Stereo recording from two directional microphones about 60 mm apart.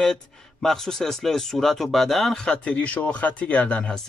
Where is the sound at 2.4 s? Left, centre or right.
Left.